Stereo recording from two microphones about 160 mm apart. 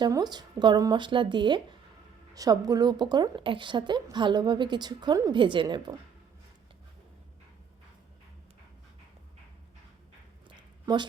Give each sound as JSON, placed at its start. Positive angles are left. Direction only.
{"t": 0.0, "sound": "a woman's voice", "side_deg": -25}